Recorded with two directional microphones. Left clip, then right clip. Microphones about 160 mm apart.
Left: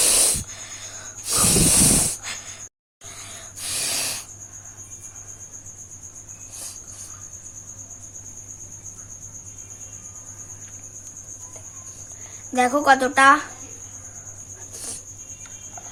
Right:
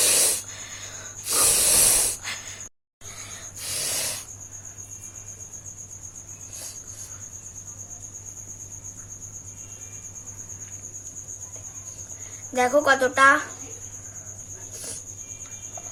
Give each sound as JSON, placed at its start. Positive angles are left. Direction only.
{"t": 0.0, "sound": "a sound", "side_deg": 10}
{"t": 1.3, "sound": "hiss", "side_deg": 0}
{"t": 3.6, "sound": "snort", "side_deg": 10}
{"t": 12.5, "sound": "speech", "side_deg": 20}